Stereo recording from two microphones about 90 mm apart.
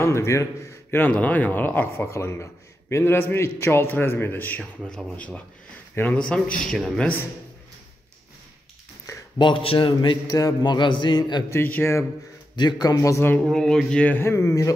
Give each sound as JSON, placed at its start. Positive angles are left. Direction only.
{"t": 0.0, "sound": "a man's voice", "side_deg": 30}
{"t": 2.0, "sound": "a man's voice", "side_deg": 30}
{"t": 9.4, "sound": "speech", "side_deg": 80}
{"t": 10.3, "sound": "a man's voice", "side_deg": 45}
{"t": 11.5, "sound": "a man's voice", "side_deg": 25}
{"t": 12.5, "sound": "a man's voice", "side_deg": 50}
{"t": 13.5, "sound": "a man's voice", "side_deg": 5}
{"t": 14.1, "sound": "a man's voice", "side_deg": 25}